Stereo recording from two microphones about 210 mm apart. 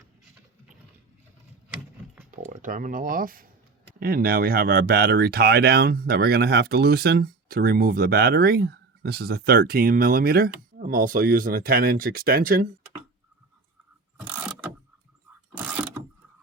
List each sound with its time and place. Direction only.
2.3 s speech: 40° right (ahead or behind)